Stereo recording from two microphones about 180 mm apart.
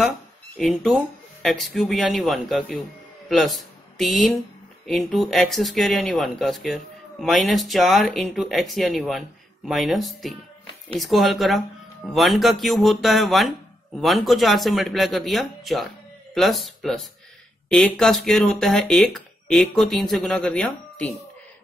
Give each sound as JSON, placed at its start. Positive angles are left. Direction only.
{"t": 0.6, "sound": "speech", "side_deg": 0}